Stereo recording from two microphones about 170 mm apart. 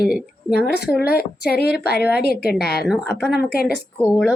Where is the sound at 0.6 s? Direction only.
65° left (ahead or behind).